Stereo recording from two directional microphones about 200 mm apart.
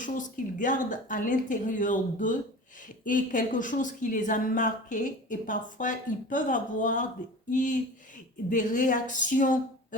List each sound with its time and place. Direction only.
0.0 s speech: 40° left (ahead or behind)